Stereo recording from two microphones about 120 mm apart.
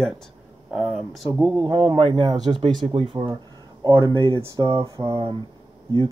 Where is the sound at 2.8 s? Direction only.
50° right (ahead or behind); by 5.3 s 30° right (ahead or behind).